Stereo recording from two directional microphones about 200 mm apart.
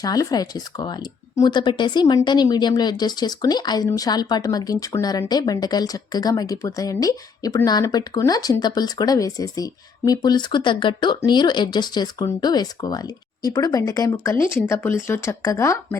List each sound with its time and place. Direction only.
0.0 s speech: 20° left (ahead or behind)